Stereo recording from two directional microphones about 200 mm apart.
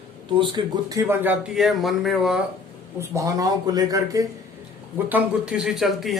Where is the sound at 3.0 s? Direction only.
15° right (ahead or behind).